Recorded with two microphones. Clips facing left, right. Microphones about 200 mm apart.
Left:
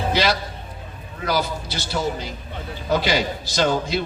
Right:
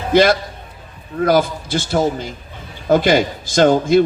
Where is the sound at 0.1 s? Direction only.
50° right (ahead or behind).